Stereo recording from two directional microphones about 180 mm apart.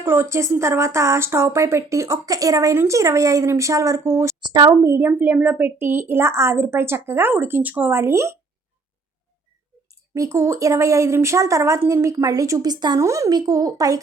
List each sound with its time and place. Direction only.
0.0 s speech: 15° right (ahead or behind)
9.9 s speech: 15° right (ahead or behind)